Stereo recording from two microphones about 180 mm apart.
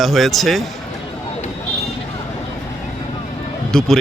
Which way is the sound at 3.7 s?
5° left (ahead or behind).